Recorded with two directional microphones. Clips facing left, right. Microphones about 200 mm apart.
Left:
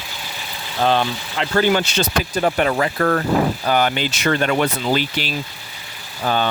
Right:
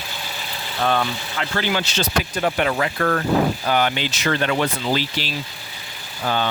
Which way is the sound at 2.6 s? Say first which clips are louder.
Left 3 dB; 35° left (ahead or behind).